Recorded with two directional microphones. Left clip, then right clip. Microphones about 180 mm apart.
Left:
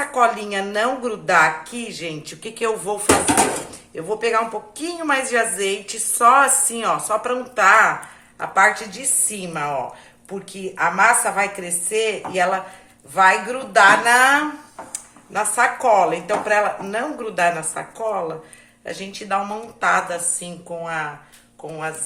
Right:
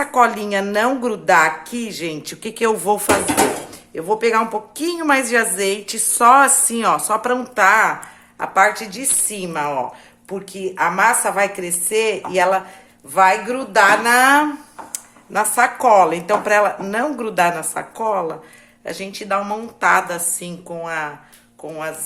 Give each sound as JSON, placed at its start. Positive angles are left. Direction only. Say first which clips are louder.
{"t": 0.0, "sound": "speech", "louder": "right 3 dB", "side_deg": -50}